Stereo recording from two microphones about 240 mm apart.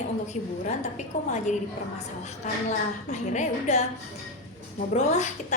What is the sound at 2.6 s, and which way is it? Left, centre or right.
A woman's voice, left.